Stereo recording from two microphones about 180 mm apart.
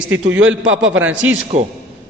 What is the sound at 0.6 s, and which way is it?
Speech, 90° right.